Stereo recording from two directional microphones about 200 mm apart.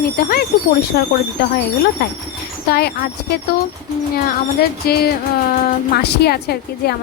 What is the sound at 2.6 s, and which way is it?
Speech, 55° left (ahead or behind).